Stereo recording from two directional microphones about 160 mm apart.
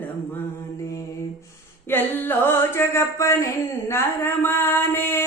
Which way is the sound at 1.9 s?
10° left (ahead or behind).